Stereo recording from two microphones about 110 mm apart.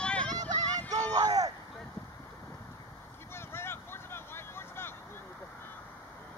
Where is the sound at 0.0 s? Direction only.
10° left (ahead or behind).